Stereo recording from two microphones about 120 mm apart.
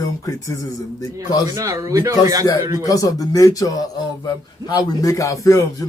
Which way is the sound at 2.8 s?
30° left (ahead or behind).